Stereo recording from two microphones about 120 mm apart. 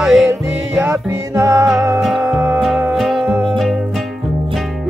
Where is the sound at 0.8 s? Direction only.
20° right (ahead or behind).